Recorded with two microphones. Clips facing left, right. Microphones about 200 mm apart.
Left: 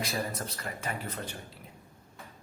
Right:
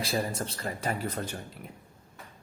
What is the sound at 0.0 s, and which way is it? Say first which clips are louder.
A man's voice: right 3 dB; 30° right (ahead or behind).